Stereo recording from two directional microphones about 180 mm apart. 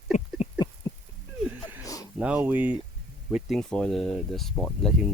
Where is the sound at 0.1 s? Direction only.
40° left (ahead or behind).